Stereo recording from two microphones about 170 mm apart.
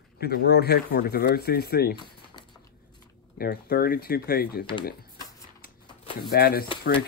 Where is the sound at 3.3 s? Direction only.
65° left (ahead or behind).